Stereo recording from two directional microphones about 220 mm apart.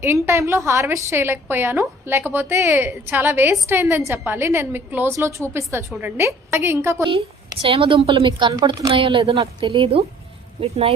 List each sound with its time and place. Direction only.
0.0 s a woman's voice: 10° right (ahead or behind)
7.6 s speech: 25° right (ahead or behind)